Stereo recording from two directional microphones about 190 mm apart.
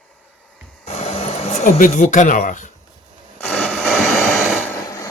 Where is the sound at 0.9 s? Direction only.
35° left (ahead or behind).